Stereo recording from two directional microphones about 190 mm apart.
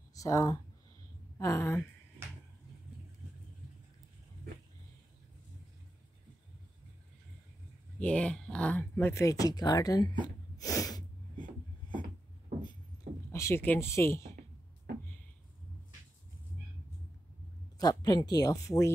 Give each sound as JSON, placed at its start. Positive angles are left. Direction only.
{"t": 0.1, "sound": "speech", "side_deg": 20}
{"t": 8.0, "sound": "speech", "side_deg": 5}
{"t": 10.2, "sound": "a sound", "side_deg": 20}
{"t": 11.4, "sound": "a sound", "side_deg": -45}
{"t": 13.3, "sound": "speech", "side_deg": 15}
{"t": 17.7, "sound": "speech", "side_deg": 20}